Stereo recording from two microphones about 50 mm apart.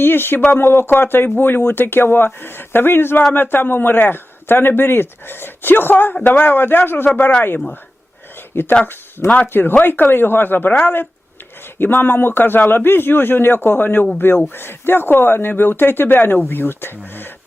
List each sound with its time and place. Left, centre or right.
0.0 s a man's voice: left
8.4 s a sound: left
8.8 s a man's voice: left